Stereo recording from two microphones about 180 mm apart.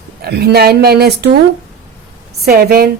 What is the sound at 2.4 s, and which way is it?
Speech, 55° right (ahead or behind).